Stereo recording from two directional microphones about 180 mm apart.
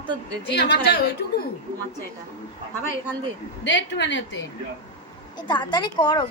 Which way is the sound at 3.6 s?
80° left.